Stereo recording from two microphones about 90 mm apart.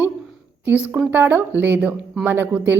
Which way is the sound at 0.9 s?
20° right (ahead or behind).